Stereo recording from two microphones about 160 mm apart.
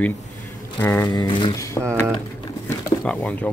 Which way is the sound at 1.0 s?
30° left (ahead or behind).